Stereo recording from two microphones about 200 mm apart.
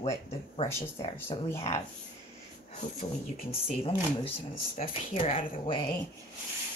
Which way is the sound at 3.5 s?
30° left (ahead or behind).